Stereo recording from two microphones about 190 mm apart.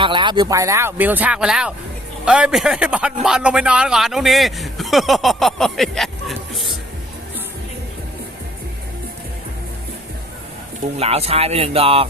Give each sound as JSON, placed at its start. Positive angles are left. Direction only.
{"t": 0.0, "sound": "a man's voice", "side_deg": -25}
{"t": 10.9, "sound": "speech", "side_deg": -35}